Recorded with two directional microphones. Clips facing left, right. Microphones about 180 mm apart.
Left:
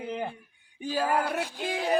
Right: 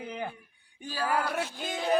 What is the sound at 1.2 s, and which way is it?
Music, 15° left (ahead or behind).